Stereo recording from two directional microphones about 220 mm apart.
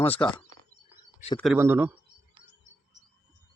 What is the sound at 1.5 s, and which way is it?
Speech, 10° right (ahead or behind).